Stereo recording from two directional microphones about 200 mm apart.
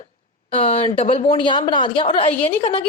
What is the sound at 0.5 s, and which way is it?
A woman's voice, 30° left (ahead or behind).